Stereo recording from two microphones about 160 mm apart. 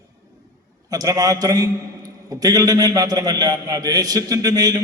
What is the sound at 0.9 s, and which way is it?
A man's voice, 20° right (ahead or behind).